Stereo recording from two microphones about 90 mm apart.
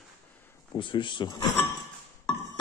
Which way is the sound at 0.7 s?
70° left (ahead or behind).